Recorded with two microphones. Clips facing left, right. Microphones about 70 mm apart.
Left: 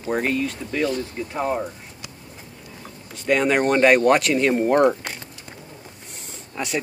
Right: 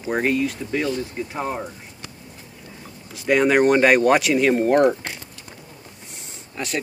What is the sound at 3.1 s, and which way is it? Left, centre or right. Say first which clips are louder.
Speech: right 2 dB; centre.